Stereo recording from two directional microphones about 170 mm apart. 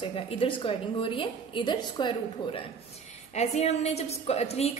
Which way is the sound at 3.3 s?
40° left (ahead or behind).